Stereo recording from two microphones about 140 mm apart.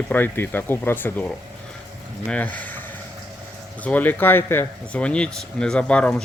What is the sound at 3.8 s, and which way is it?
Speech, 10° left (ahead or behind).